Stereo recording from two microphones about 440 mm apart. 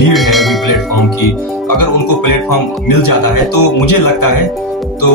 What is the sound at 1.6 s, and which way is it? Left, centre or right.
Speech, left.